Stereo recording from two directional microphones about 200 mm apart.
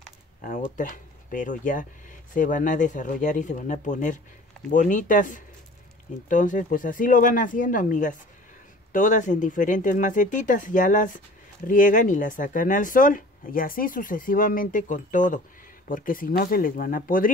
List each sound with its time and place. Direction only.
0.7 s speech: 40° left (ahead or behind)